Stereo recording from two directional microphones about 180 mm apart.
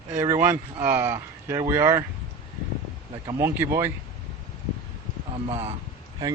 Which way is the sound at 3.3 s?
15° right (ahead or behind).